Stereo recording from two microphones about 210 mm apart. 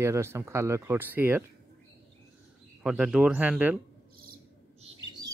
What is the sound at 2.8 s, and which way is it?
Speech, 5° right (ahead or behind).